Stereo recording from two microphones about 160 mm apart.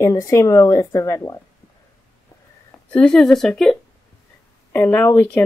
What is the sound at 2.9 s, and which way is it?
Speech, 5° left (ahead or behind).